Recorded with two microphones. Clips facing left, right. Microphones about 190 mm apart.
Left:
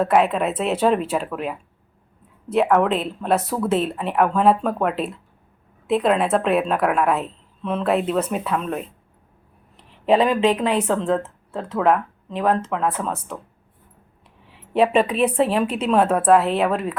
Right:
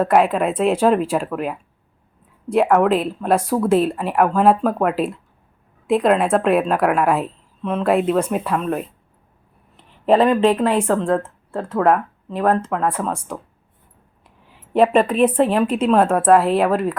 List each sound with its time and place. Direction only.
0.0 s a woman's voice: 5° right (ahead or behind)
9.9 s a woman's voice: centre (ahead or behind)
14.4 s a woman's voice: centre (ahead or behind)